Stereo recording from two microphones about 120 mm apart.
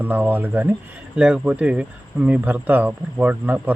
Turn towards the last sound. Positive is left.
turn(degrees=-15)  # may be behind; listen again after turning